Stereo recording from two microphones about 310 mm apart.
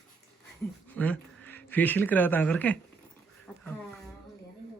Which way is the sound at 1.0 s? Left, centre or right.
Centre.